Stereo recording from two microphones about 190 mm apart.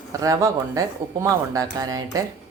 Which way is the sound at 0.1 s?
15° right (ahead or behind).